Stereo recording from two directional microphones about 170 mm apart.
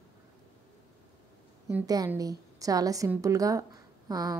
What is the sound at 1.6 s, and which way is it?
A woman's voice, 20° right (ahead or behind).